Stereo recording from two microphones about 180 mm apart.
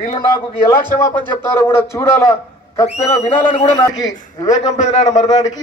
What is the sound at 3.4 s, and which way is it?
Speech, 35° left (ahead or behind).